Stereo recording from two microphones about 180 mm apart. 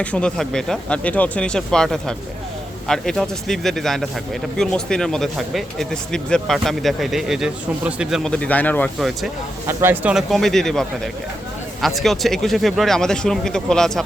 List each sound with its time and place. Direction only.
0.0 s speech: 5° left (ahead or behind)
9.6 s speech: 10° right (ahead or behind)